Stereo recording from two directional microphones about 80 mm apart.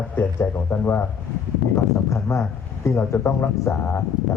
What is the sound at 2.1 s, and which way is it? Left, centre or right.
Speech, left.